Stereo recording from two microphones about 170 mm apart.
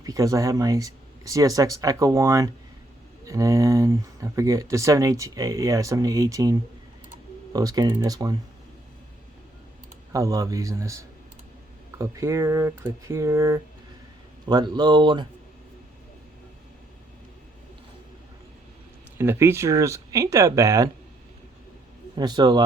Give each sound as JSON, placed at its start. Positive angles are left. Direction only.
{"t": 0.0, "sound": "speech", "side_deg": -20}
{"t": 10.1, "sound": "speech", "side_deg": -20}
{"t": 19.1, "sound": "speech", "side_deg": -15}
{"t": 22.1, "sound": "speech", "side_deg": -25}